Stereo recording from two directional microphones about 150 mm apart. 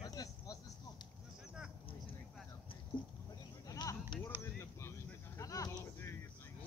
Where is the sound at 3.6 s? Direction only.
25° left (ahead or behind).